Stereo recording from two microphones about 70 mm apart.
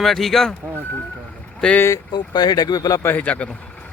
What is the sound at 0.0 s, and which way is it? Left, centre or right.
Speech, centre.